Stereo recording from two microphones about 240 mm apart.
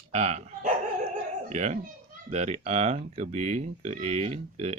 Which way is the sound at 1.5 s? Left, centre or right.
Right.